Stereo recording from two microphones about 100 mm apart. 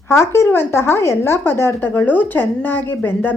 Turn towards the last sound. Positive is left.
turn(degrees=20)  # may be behind; listen again after turning